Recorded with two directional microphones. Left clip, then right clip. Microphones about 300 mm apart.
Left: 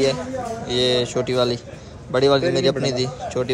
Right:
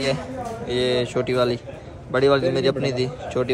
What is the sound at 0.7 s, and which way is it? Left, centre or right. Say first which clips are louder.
Speech: left 2 dB; centre.